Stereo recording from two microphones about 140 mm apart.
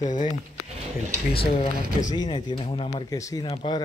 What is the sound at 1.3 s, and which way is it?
Speech, 90° left.